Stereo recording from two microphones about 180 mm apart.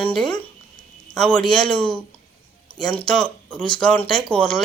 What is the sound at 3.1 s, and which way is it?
Speech, 5° left (ahead or behind).